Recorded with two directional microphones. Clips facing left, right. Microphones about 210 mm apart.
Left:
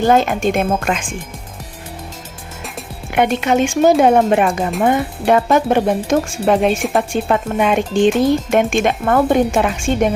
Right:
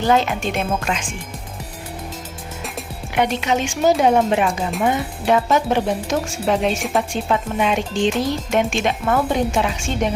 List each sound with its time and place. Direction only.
0.0 s speech: 50° left (ahead or behind)
3.2 s speech: 55° left (ahead or behind)